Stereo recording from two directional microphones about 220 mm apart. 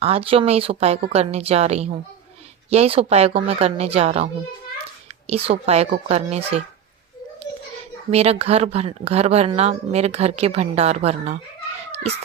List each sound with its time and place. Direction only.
0.0 s speech: 25° right (ahead or behind)
5.3 s speech: 25° right (ahead or behind)
8.1 s speech: 25° right (ahead or behind)